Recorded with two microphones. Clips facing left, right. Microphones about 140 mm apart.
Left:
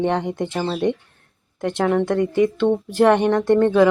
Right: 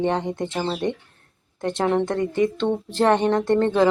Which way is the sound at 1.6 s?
25° right (ahead or behind).